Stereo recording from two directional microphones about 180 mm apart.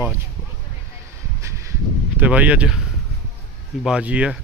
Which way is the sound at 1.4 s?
15° right (ahead or behind).